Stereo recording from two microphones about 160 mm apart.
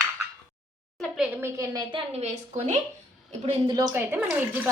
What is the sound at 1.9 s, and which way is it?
Speech, 40° right (ahead or behind).